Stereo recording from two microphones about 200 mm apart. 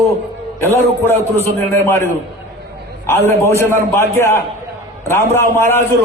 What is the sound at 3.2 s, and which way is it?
A man's voice, 15° left (ahead or behind).